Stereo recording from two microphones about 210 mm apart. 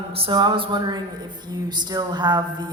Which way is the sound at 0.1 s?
25° right (ahead or behind).